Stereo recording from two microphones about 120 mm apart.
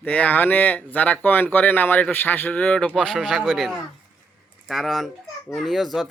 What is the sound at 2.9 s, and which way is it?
Speech, 5° right (ahead or behind).